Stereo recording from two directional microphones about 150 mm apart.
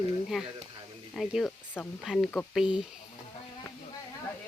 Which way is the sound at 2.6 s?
5° right (ahead or behind).